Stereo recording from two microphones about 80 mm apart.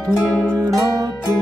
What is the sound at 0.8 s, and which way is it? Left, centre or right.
Music, right.